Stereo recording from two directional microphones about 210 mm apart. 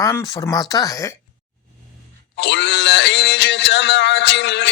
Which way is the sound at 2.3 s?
55° left (ahead or behind).